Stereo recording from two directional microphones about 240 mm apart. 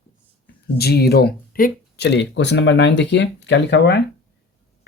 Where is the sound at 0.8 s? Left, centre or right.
Left.